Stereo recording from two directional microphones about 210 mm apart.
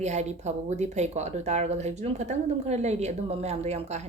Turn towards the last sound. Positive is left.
turn(degrees=-30)  # may be behind; listen again after turning